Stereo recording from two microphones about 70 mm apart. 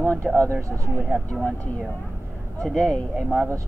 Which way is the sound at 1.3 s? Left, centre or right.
Left.